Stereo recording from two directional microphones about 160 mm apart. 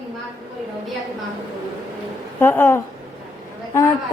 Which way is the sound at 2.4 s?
15° left (ahead or behind).